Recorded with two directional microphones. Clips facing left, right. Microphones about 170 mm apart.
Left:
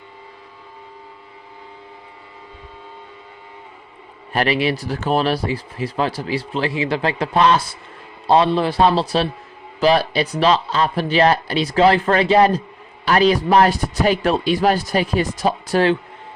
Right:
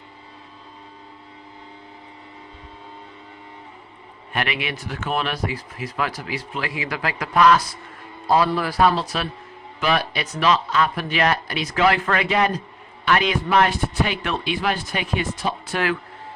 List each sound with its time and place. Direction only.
4.3 s a man's voice: 35° left (ahead or behind)